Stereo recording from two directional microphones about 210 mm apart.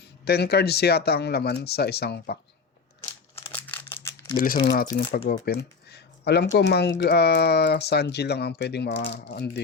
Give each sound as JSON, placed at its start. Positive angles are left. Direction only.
{"t": 0.3, "sound": "speech", "side_deg": 50}
{"t": 3.5, "sound": "crumpling", "side_deg": 10}
{"t": 4.6, "sound": "speech", "side_deg": 50}